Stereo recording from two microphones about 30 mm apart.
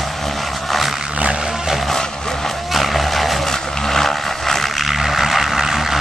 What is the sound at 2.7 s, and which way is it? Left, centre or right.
Vehicle, centre.